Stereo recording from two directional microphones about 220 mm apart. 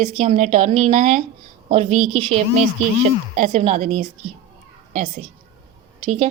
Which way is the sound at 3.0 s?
30° right (ahead or behind).